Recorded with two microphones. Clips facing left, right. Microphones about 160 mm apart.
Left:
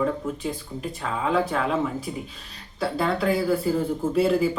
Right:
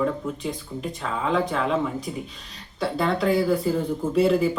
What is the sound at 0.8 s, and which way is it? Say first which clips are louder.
Speech: even; 5° left (ahead or behind).